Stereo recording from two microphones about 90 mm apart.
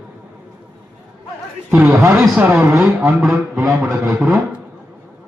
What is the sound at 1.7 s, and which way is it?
A man's voice, 15° right (ahead or behind).